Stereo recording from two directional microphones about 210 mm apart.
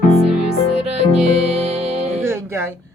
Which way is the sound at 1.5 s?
30° right (ahead or behind).